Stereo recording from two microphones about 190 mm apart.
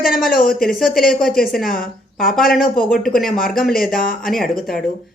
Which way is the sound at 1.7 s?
45° left (ahead or behind).